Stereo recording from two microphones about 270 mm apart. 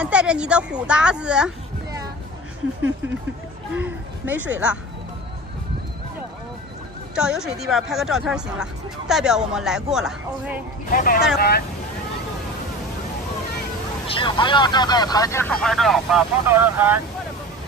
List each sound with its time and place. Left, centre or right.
0.0 s speech: centre
3.7 s speech: centre
7.2 s speech: centre
10.9 s speech: left
14.0 s speech: centre